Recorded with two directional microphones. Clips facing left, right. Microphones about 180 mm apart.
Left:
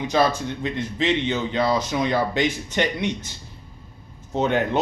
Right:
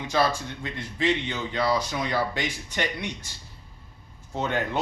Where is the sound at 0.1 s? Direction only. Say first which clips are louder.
Left 3 dB; 20° left (ahead or behind).